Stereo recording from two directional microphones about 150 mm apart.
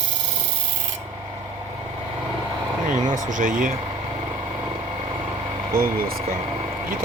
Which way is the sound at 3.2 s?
60° right (ahead or behind).